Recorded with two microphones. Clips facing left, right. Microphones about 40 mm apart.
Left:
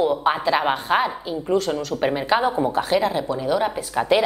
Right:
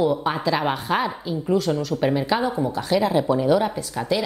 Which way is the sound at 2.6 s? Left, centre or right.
Left.